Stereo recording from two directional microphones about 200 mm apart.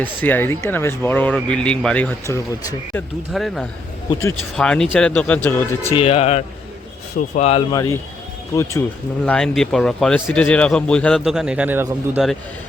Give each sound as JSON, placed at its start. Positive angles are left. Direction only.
{"t": 0.0, "sound": "speech", "side_deg": 10}
{"t": 3.3, "sound": "speech", "side_deg": 0}
{"t": 4.1, "sound": "speech", "side_deg": 20}
{"t": 4.5, "sound": "speech", "side_deg": 5}
{"t": 5.9, "sound": "speech", "side_deg": 30}
{"t": 8.5, "sound": "speech", "side_deg": 15}
{"t": 9.2, "sound": "speech", "side_deg": 5}